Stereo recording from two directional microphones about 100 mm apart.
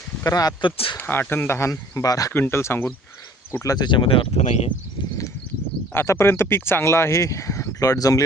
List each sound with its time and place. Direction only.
0.3 s speech: 40° left (ahead or behind)
0.6 s speech: 60° left (ahead or behind)
0.9 s speech: 20° left (ahead or behind); by 2.3 s 35° left (ahead or behind)
2.3 s speech: 25° left (ahead or behind)
3.6 s speech: 35° left (ahead or behind)
3.8 s speech: 55° left (ahead or behind); by 4.7 s 75° left (ahead or behind)
5.9 s speech: 25° left (ahead or behind)